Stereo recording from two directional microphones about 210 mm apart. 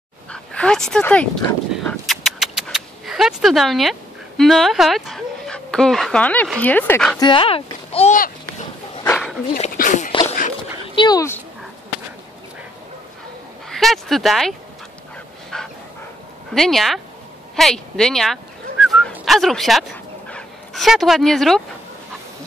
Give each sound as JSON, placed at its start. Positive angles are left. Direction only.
{"t": 0.3, "sound": "a sound", "side_deg": 5}
{"t": 4.4, "sound": "speech", "side_deg": 0}
{"t": 7.2, "sound": "a child's voice", "side_deg": 25}
{"t": 8.2, "sound": "a sound", "side_deg": 35}
{"t": 9.0, "sound": "dog", "side_deg": 10}
{"t": 9.6, "sound": "a sound", "side_deg": 35}
{"t": 11.0, "sound": "speech", "side_deg": 20}
{"t": 13.7, "sound": "speech", "side_deg": 0}
{"t": 15.5, "sound": "dog", "side_deg": 0}
{"t": 16.5, "sound": "speech", "side_deg": 0}
{"t": 17.6, "sound": "dog", "side_deg": 0}